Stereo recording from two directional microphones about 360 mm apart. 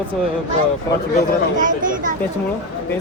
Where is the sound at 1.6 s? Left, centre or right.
Right.